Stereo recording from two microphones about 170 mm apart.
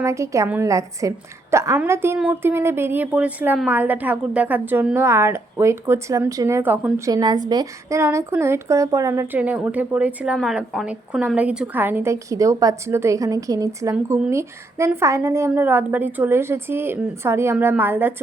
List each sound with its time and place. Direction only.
0.0 s a woman's voice: 15° right (ahead or behind)
7.1 s a woman's voice: 25° right (ahead or behind)